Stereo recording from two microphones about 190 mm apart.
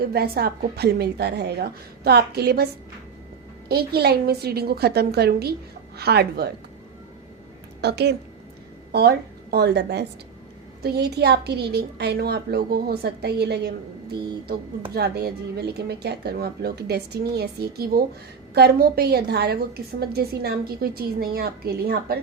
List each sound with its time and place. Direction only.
0.0 s a woman's voice: 55° right (ahead or behind)
3.7 s a woman's voice: 55° right (ahead or behind)
7.8 s a woman's voice: 60° right (ahead or behind)